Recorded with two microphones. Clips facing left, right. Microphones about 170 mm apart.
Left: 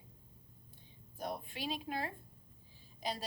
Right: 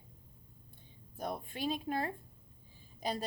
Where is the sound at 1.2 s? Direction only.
50° right (ahead or behind).